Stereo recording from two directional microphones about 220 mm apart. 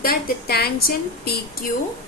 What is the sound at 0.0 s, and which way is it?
A woman's voice, 45° left (ahead or behind).